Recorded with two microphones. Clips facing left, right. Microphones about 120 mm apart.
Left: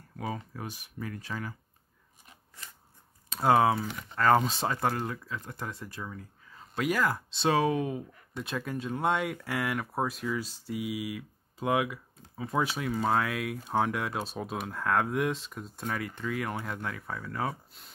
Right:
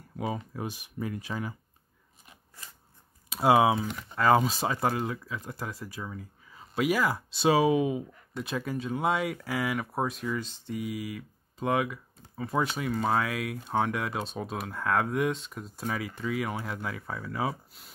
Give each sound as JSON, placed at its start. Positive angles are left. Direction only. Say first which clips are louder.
{"t": 0.1, "sound": "speech", "louder": "right 3 dB", "side_deg": -15}
{"t": 3.3, "sound": "speech", "louder": "right 2 dB", "side_deg": -10}